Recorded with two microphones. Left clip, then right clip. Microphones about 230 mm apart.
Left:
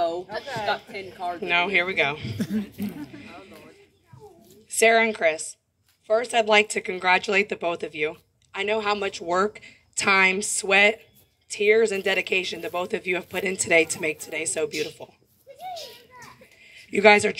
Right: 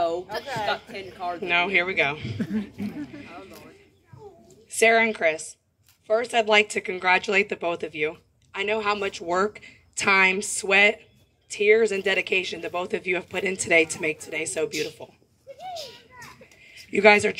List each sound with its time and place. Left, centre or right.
0.8 s a woman's voice: centre
1.4 s speech: centre
2.3 s speech: left
4.6 s speech: centre
15.5 s a sound: centre
16.6 s a sound: centre